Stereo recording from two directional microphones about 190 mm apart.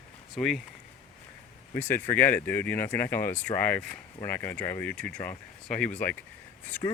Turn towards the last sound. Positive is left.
turn(degrees=25)  # may be behind; listen again after turning